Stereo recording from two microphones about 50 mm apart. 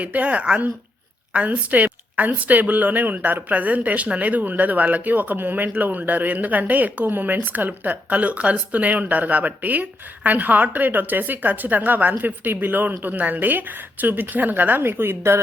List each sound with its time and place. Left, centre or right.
0.0 s a woman's voice: right